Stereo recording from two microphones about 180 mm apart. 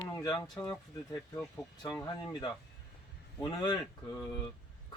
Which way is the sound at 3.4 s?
25° left (ahead or behind).